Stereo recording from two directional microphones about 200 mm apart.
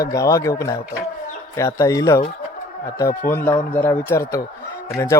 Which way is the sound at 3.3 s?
10° left (ahead or behind).